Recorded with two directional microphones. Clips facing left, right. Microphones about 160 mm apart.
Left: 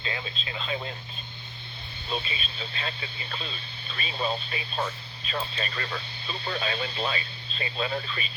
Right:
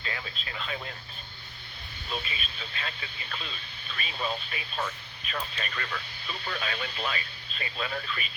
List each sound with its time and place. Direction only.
0.0 s speech: 20° left (ahead or behind)
2.0 s speech: 30° left (ahead or behind)